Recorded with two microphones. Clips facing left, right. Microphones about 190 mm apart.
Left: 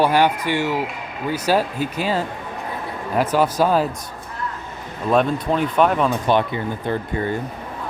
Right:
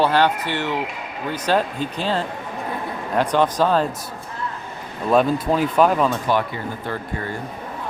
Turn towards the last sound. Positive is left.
turn(degrees=20)  # may be behind; listen again after turning